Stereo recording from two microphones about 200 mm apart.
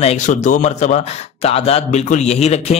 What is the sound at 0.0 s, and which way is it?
Speech, 35° left (ahead or behind).